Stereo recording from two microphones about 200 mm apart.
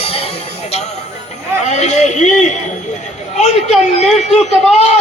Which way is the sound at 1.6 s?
35° left (ahead or behind).